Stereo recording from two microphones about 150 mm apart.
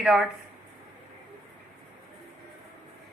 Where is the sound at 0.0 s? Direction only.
Centre (ahead or behind).